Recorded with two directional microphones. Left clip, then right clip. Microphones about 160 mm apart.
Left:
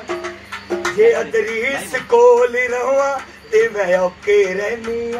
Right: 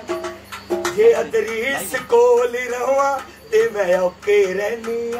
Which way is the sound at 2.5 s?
45° right (ahead or behind).